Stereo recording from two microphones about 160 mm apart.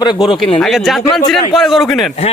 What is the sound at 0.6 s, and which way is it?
Speech, centre (ahead or behind).